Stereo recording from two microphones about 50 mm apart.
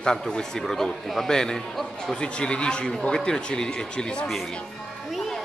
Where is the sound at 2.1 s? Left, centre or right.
Left.